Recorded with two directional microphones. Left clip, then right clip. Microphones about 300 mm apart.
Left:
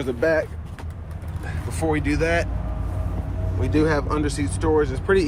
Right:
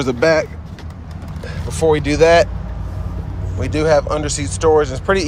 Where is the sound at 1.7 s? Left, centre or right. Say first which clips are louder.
Right 9 dB; centre.